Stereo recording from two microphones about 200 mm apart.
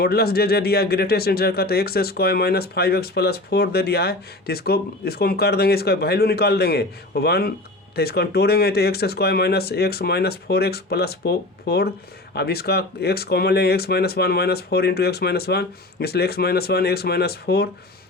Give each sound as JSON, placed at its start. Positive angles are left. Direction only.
{"t": 0.0, "sound": "speech", "side_deg": 50}